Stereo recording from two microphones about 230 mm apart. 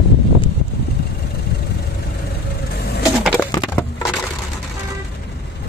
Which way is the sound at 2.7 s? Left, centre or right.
Left.